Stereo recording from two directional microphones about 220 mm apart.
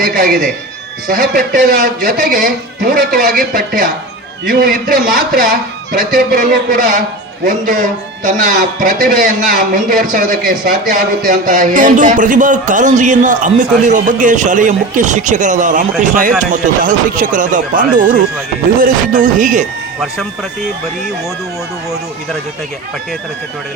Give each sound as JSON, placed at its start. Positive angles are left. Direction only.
{"t": 0.0, "sound": "speech", "side_deg": -40}